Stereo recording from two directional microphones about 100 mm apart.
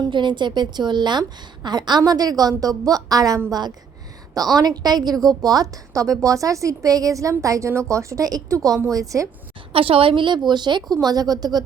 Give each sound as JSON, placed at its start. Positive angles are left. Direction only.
{"t": 0.0, "sound": "a woman's voice", "side_deg": -50}
{"t": 4.5, "sound": "a woman's voice", "side_deg": -40}
{"t": 9.7, "sound": "a woman's voice", "side_deg": -65}